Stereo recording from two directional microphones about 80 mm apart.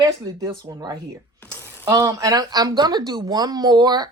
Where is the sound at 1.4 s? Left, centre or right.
Right.